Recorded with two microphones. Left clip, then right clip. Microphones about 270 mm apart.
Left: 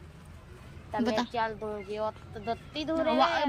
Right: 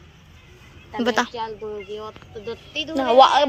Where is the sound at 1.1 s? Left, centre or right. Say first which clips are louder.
Right 8 dB; centre.